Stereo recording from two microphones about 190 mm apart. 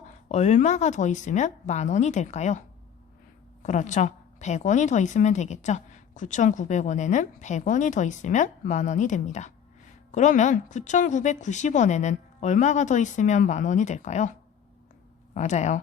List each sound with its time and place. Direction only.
0.3 s a woman's voice: 35° left (ahead or behind)
15.4 s a woman's voice: 40° left (ahead or behind)